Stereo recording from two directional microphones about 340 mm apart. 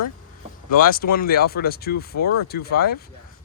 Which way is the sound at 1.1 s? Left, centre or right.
Left.